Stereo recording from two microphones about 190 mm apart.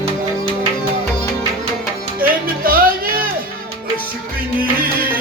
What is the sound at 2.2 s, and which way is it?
Music, 50° right (ahead or behind).